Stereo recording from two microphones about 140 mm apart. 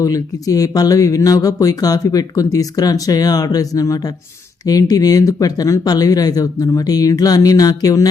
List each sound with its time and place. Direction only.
0.0 s speech: 25° left (ahead or behind)